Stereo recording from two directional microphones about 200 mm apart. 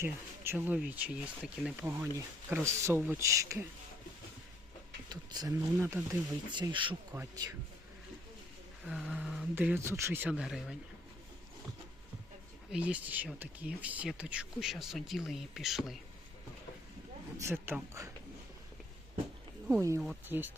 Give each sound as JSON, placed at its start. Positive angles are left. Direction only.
{"t": 0.0, "sound": "speech", "side_deg": -10}
{"t": 5.0, "sound": "speech", "side_deg": -20}
{"t": 8.9, "sound": "speech", "side_deg": -5}
{"t": 12.7, "sound": "speech", "side_deg": -5}
{"t": 17.3, "sound": "speech", "side_deg": -10}
{"t": 20.0, "sound": "speech", "side_deg": -5}